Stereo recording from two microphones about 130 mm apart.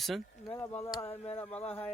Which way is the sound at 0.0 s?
Centre (ahead or behind).